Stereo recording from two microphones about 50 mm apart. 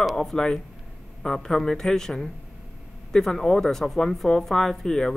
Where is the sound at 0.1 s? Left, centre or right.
Centre.